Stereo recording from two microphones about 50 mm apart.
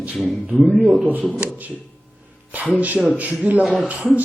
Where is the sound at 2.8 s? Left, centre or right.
Right.